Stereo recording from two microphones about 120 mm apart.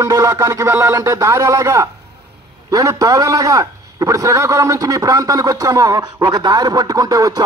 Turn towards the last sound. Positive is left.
turn(degrees=-30)  # may be behind; listen again after turning